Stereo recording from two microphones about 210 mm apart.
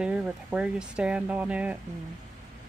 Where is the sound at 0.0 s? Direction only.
5° right (ahead or behind).